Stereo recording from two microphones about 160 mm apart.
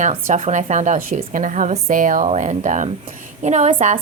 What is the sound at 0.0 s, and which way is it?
A woman's voice, 50° right (ahead or behind).